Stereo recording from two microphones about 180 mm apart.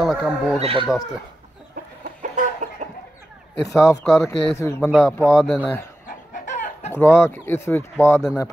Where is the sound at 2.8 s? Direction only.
40° right (ahead or behind).